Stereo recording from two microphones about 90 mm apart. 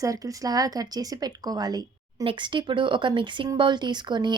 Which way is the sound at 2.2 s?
70° right (ahead or behind).